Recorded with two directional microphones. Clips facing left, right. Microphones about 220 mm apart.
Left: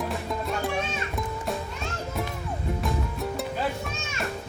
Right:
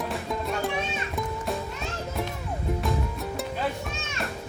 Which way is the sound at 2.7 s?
Centre (ahead or behind).